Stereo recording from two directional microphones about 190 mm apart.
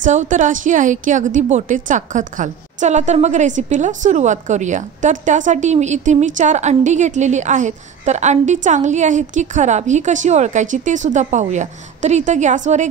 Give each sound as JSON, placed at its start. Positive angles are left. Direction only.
{"t": 0.0, "sound": "a woman's voice", "side_deg": -40}